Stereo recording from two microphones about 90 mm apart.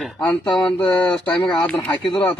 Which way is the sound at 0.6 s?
10° left (ahead or behind).